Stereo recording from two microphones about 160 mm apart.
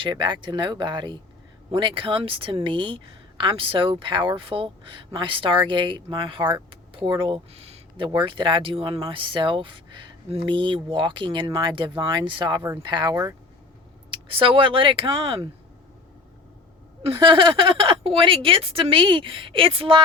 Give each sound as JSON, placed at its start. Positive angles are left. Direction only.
{"t": 0.0, "sound": "a woman's voice", "side_deg": -30}
{"t": 17.0, "sound": "a woman's voice", "side_deg": -30}